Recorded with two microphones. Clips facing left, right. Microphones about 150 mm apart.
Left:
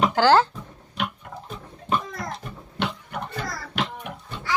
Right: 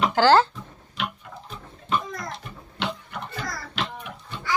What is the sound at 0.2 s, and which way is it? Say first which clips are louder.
Speech: right 1 dB; 15° left (ahead or behind).